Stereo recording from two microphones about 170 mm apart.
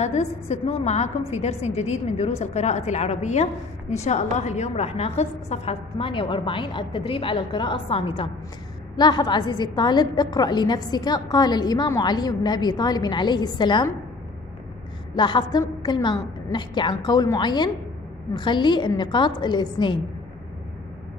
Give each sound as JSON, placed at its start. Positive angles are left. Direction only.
{"t": 0.0, "sound": "a woman's voice", "side_deg": 40}
{"t": 15.1, "sound": "a woman's voice", "side_deg": 25}